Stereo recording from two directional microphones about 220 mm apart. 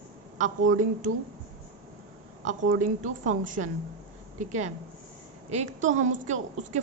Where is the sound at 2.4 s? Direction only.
35° right (ahead or behind).